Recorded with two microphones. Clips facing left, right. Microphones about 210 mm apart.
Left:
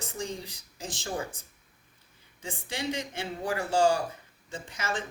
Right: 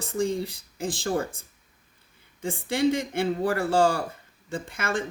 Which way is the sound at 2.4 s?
55° right (ahead or behind).